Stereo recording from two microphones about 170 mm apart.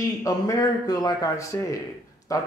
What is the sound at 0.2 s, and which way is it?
Speech, 20° left (ahead or behind).